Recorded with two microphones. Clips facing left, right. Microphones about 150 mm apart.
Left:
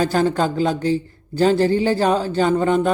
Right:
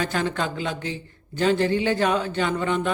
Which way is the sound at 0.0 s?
35° left (ahead or behind).